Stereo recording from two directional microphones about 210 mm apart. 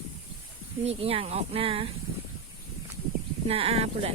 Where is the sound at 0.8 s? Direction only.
25° right (ahead or behind).